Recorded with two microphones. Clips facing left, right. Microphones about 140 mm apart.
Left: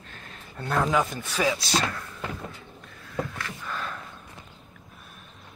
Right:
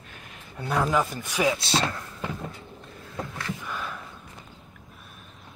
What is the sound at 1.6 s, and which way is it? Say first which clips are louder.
Speech: right 1 dB; 30° right (ahead or behind).